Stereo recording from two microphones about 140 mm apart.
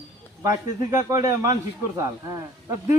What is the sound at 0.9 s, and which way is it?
Speech, 25° right (ahead or behind).